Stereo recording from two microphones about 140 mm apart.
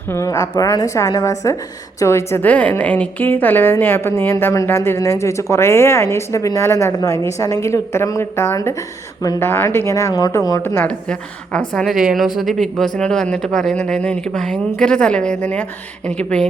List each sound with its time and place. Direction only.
0.1 s a woman's voice: 20° left (ahead or behind)